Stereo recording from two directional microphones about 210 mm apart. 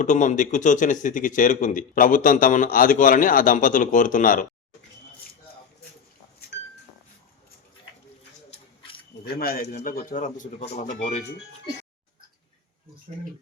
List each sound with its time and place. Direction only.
0.0 s speech: 35° left (ahead or behind)
8.4 s a sound: 25° left (ahead or behind)
9.2 s speech: 45° left (ahead or behind)